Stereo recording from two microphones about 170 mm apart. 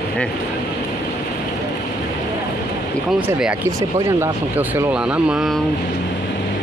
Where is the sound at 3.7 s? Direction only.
20° right (ahead or behind).